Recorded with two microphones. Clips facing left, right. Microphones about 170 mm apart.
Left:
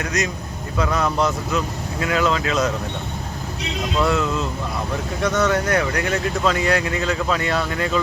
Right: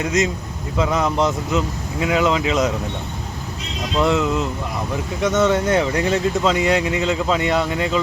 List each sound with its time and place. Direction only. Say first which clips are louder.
0.0 s speech: right 4 dB; 20° right (ahead or behind)
3.9 s speech: right 3 dB; 20° right (ahead or behind)